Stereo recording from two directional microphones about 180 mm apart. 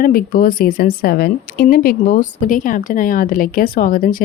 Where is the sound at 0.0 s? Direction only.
55° left (ahead or behind).